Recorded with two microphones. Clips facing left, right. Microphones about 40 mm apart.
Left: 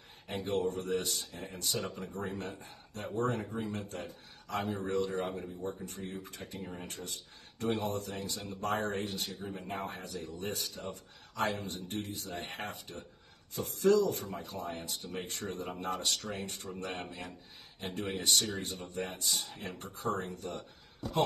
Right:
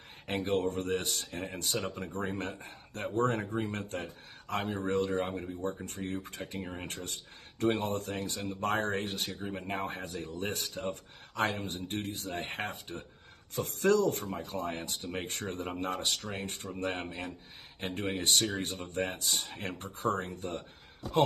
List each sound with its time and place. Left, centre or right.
0.3 s speech: right
1.3 s speech: right
2.0 s speech: right
13.6 s speech: right